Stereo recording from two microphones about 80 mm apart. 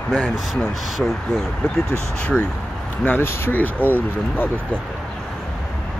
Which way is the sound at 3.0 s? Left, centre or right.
Left.